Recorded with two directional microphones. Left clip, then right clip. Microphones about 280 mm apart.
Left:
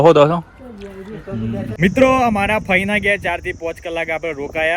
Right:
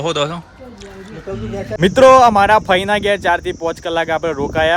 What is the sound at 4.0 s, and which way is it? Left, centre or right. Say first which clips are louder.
Speech: right 4 dB; right.